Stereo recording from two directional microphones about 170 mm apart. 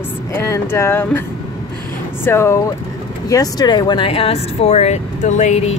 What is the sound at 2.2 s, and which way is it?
Speech, 15° left (ahead or behind).